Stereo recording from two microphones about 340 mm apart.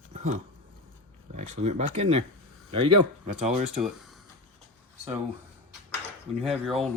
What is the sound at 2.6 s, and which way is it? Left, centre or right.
Speech, centre.